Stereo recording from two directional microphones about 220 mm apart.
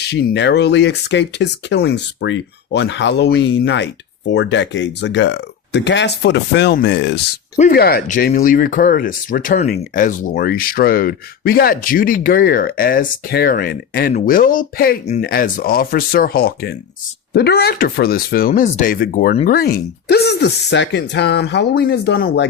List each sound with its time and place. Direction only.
0.0 s speech: 50° left (ahead or behind)